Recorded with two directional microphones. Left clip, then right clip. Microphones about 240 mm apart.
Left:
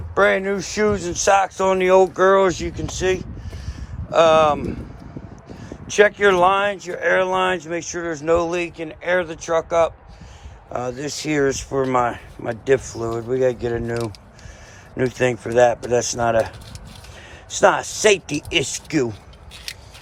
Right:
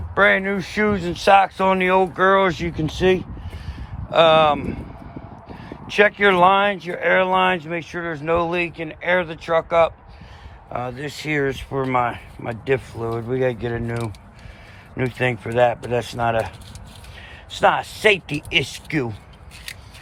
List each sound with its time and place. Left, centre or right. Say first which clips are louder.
0.1 s speech: right 1 dB; centre
4.1 s speech: even; centre
5.9 s speech: left 1 dB; centre
14.9 s speech: left 2 dB; centre
17.6 s speech: left 1 dB; left
18.3 s speech: right 1 dB; left
18.6 s speech: left 3 dB; left